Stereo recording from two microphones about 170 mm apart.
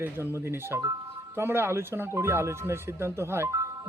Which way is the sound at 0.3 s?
15° right (ahead or behind).